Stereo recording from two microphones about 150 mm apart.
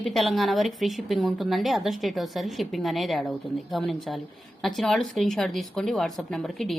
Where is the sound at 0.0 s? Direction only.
Centre (ahead or behind).